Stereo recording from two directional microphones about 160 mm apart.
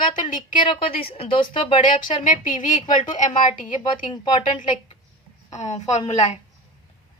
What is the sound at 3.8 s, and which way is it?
Speech, 30° left (ahead or behind).